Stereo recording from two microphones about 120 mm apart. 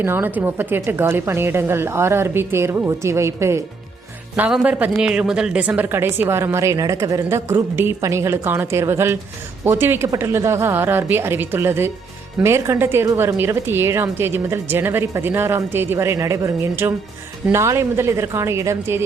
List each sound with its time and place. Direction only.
0.0 s a woman's voice: 20° right (ahead or behind)
4.4 s a woman's voice: 10° right (ahead or behind)